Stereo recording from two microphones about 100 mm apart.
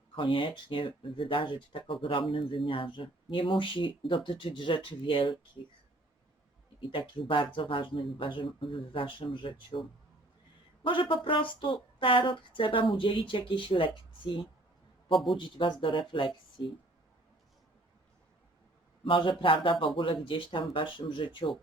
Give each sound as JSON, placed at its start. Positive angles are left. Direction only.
{"t": 0.2, "sound": "speech", "side_deg": 60}
{"t": 6.7, "sound": "speech", "side_deg": 55}
{"t": 10.8, "sound": "speech", "side_deg": 55}
{"t": 19.0, "sound": "speech", "side_deg": 60}